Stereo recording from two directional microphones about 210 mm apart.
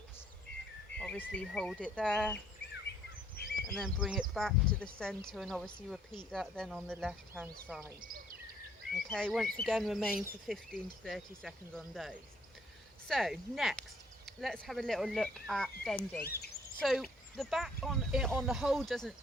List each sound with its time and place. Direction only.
0.9 s speech: 5° left (ahead or behind)
3.4 s a sound: 50° left (ahead or behind)
3.8 s speech: centre (ahead or behind)
8.0 s a sound: 40° right (ahead or behind)
9.0 s speech: 5° left (ahead or behind)
16.2 s bird: 50° left (ahead or behind)
16.8 s speech: centre (ahead or behind)